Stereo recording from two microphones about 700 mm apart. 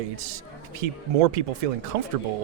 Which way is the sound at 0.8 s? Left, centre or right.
Right.